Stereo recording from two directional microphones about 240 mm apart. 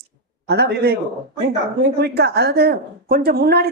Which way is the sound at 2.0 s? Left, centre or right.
Right.